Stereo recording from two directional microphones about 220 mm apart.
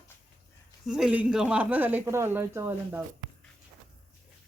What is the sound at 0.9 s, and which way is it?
Speech, 5° right (ahead or behind).